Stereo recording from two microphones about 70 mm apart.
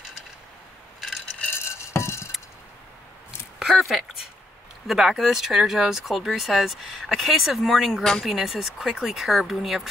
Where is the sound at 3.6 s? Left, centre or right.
Centre.